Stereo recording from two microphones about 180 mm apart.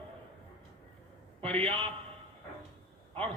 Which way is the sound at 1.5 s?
30° right (ahead or behind).